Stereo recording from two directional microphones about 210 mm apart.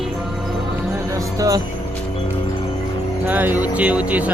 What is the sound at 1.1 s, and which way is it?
Music, 15° right (ahead or behind).